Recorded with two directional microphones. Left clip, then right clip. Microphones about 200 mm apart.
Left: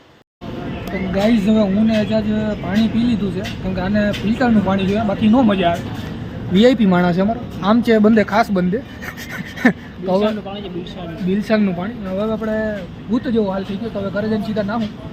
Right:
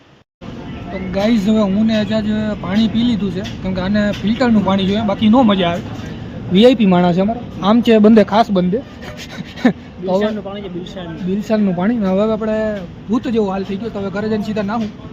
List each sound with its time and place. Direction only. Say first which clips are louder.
1.1 s speech: right 1 dB; 20° right (ahead or behind)
11.3 s speech: even; 10° right (ahead or behind)
11.8 s speech: right 7 dB; 30° right (ahead or behind)